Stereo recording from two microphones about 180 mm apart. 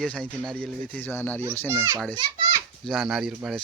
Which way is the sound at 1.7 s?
15° right (ahead or behind).